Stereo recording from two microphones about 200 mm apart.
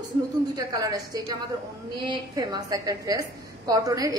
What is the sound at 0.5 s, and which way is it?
A woman's voice, 15° right (ahead or behind).